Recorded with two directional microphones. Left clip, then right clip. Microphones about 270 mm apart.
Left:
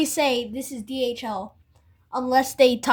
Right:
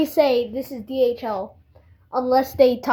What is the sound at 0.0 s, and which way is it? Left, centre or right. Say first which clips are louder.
A woman's voice: right 4 dB; left.